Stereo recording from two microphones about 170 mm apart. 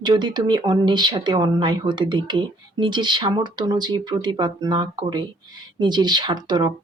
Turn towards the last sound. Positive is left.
turn(degrees=-25)  # may be behind; listen again after turning